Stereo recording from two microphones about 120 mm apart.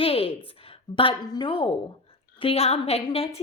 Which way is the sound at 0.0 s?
50° left (ahead or behind).